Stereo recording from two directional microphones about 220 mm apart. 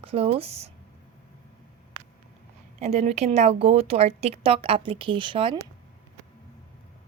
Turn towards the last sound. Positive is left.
turn(degrees=-25)  # may be behind; listen again after turning